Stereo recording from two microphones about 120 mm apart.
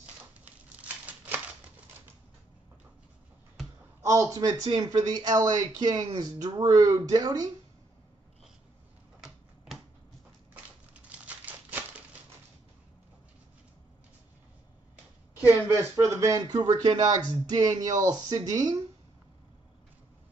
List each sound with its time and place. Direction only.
0.5 s crumpling: 15° right (ahead or behind)
4.0 s a man's voice: 25° right (ahead or behind)
10.5 s crumpling: 10° right (ahead or behind)
15.4 s speech: 25° right (ahead or behind)